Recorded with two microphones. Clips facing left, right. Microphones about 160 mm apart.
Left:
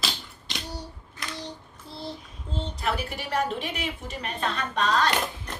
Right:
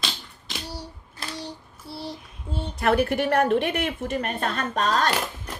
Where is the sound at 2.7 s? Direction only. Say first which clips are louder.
Right 11 dB; 60° right (ahead or behind); by 5.0 s 45° right (ahead or behind).